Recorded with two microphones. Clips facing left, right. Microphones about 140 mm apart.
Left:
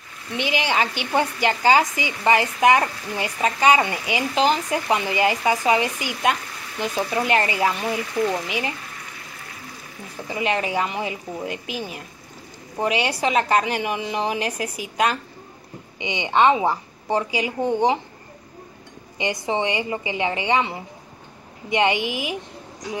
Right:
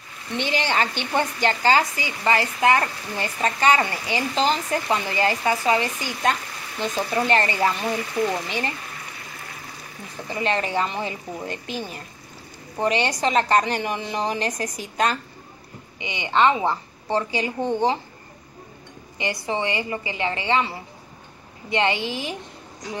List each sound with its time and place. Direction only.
0.3 s speech: 10° left (ahead or behind)
10.2 s speech: 10° left (ahead or behind)
16.0 s speech: 20° left (ahead or behind)
19.1 s a woman's voice: 20° left (ahead or behind)